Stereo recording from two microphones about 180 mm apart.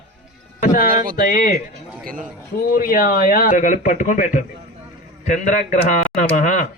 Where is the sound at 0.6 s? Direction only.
50° left (ahead or behind).